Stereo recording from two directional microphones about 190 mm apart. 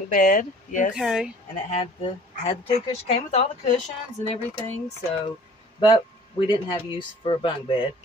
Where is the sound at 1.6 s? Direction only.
35° left (ahead or behind).